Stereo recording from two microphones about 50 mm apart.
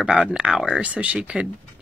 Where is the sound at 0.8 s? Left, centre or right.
Right.